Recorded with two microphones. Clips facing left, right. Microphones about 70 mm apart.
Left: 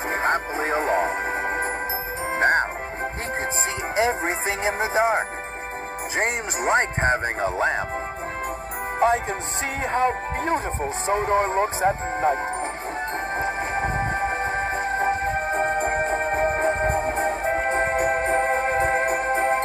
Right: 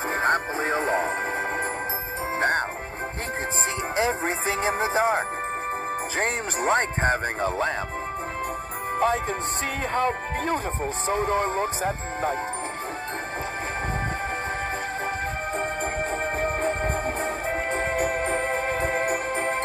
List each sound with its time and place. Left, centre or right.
0.1 s music: left
2.3 s music: left
3.9 s music: left
6.1 s speech: left
9.9 s speech: left
15.0 s music: left